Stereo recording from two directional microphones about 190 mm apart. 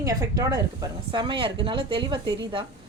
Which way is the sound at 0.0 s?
20° right (ahead or behind).